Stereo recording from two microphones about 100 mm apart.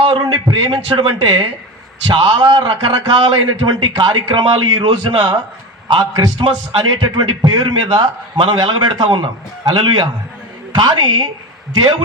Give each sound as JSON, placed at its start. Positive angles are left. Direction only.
{"t": 0.0, "sound": "a man's voice", "side_deg": -70}
{"t": 2.0, "sound": "a man's voice", "side_deg": -60}